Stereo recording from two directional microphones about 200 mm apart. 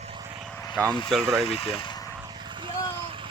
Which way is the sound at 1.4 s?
30° left (ahead or behind).